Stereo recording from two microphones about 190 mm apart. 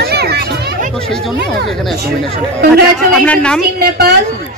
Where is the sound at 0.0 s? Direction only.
55° right (ahead or behind).